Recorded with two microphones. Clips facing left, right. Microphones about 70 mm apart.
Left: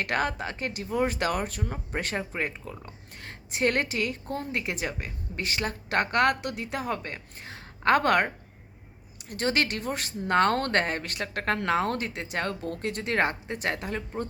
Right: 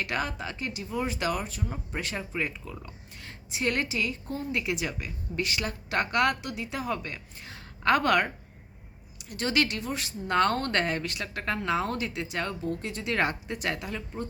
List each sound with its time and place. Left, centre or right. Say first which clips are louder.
0.0 s speech: left 3 dB; left